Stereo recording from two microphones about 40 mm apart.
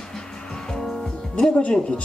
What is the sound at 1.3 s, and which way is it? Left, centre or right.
Speech, left.